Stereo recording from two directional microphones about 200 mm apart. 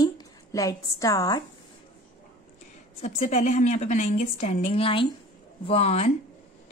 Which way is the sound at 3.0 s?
35° left (ahead or behind).